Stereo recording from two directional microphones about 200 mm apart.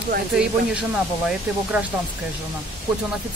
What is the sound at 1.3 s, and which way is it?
Speech, 5° right (ahead or behind).